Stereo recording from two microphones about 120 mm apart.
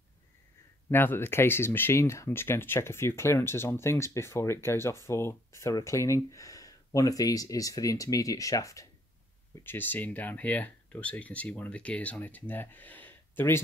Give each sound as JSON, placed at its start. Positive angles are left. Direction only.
{"t": 0.8, "sound": "speech", "side_deg": 20}
{"t": 9.6, "sound": "speech", "side_deg": 15}